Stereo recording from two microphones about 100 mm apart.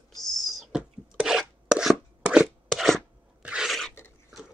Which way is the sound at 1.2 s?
5° right (ahead or behind).